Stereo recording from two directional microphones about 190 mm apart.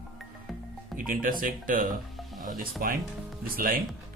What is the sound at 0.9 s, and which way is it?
Speech, 45° right (ahead or behind).